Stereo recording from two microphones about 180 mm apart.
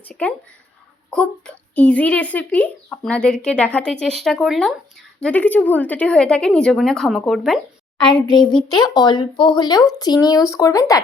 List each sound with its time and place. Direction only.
0.0 s a child's voice: 5° left (ahead or behind)
8.0 s speech: 25° left (ahead or behind)